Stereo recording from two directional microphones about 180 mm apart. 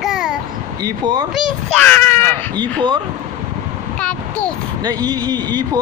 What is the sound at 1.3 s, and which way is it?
A child's voice, 10° left (ahead or behind).